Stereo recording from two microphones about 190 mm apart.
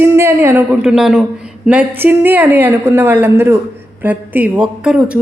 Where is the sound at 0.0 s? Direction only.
15° right (ahead or behind).